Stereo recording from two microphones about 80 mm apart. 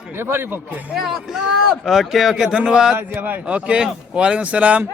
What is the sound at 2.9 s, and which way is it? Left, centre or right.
Speech, right.